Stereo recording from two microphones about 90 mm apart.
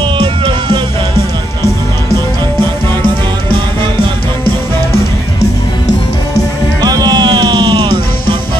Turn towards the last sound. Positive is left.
turn(degrees=-55)  # may be behind; listen again after turning